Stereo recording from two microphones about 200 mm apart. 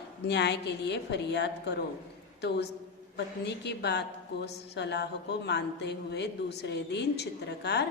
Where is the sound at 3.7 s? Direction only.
55° left (ahead or behind).